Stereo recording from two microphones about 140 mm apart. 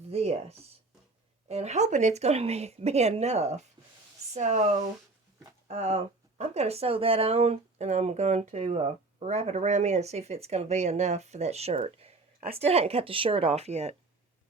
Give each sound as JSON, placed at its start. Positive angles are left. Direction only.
{"t": 0.1, "sound": "speech", "side_deg": -50}
{"t": 5.6, "sound": "speech", "side_deg": -50}